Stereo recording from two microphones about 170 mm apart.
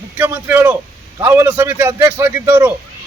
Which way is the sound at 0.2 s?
10° right (ahead or behind).